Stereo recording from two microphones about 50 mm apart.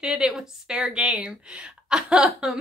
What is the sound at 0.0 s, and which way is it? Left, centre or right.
A woman's voice, centre.